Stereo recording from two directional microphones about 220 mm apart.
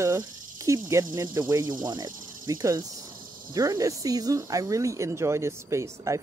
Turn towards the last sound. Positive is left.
turn(degrees=-15)  # may be behind; listen again after turning